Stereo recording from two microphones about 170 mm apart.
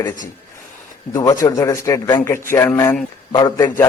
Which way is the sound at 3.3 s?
20° left (ahead or behind).